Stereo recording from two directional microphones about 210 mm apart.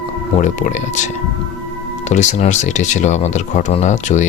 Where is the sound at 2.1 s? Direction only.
35° left (ahead or behind).